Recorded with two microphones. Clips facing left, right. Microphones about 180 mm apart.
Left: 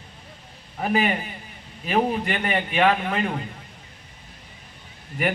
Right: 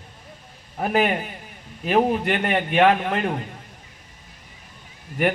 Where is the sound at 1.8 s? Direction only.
55° right (ahead or behind).